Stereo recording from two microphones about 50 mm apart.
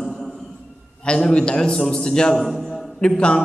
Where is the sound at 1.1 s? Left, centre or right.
Centre.